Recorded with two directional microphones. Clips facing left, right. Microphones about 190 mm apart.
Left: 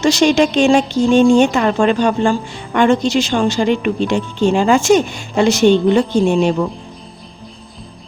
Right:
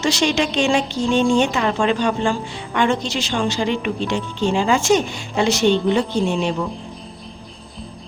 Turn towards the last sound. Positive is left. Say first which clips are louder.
# left 6 dB
turn(degrees=45)  # may be behind; listen again after turning